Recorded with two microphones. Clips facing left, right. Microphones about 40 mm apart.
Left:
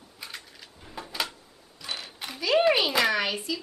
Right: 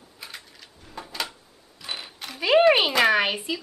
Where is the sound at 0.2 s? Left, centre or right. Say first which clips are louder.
Even; centre.